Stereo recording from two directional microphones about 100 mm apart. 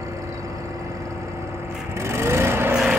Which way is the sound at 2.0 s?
25° right (ahead or behind).